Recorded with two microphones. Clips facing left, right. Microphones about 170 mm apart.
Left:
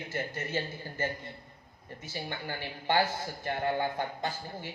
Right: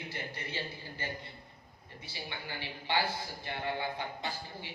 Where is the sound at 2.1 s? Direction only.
45° left (ahead or behind).